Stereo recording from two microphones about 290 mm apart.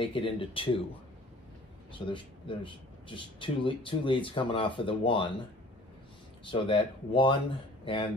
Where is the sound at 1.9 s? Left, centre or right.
Centre.